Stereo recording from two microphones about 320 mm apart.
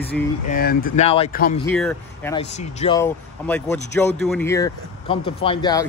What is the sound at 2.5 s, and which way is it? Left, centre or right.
Speech, left.